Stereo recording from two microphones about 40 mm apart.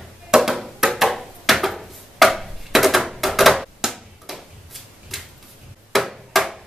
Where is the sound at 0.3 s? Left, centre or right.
Centre.